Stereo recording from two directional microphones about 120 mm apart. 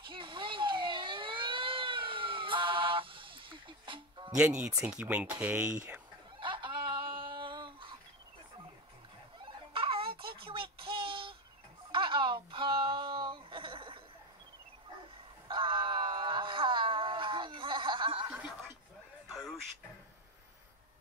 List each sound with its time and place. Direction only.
0.1 s a sound: 45° right (ahead or behind)
4.4 s speech: 10° right (ahead or behind)
6.4 s fowl: 45° right (ahead or behind)
9.4 s a sound: 50° right (ahead or behind)
11.9 s wail: 45° right (ahead or behind)
15.4 s wail: 45° right (ahead or behind)
18.3 s snicker: 10° right (ahead or behind)